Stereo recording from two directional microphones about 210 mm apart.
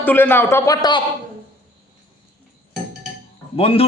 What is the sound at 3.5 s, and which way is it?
Speech, 25° left (ahead or behind).